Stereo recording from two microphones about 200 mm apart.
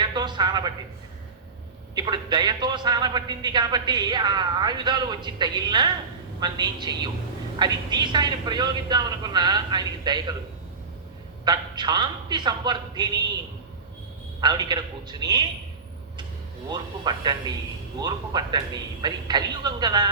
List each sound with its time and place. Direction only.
0.0 s a sound: 20° right (ahead or behind)
2.0 s a man's voice: 20° right (ahead or behind)
11.4 s a man's voice: 20° right (ahead or behind)
14.4 s a man's voice: 20° right (ahead or behind)
16.6 s a man's voice: 20° right (ahead or behind)